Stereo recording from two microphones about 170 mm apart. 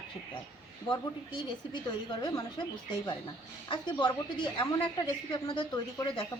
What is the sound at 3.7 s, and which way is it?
A woman's voice, 25° left (ahead or behind).